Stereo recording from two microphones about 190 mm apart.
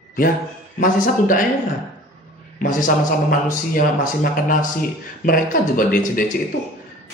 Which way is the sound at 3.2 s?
45° left (ahead or behind).